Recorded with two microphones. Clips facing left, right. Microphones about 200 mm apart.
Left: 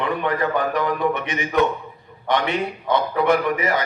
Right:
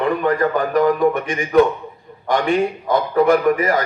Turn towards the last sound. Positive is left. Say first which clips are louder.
# right 4 dB
turn(degrees=-45)  # may be behind; listen again after turning